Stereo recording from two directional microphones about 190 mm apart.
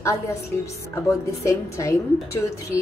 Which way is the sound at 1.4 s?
15° left (ahead or behind).